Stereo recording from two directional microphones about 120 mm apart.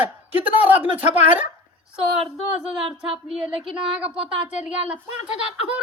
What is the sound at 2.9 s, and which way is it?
Speech, 55° right (ahead or behind).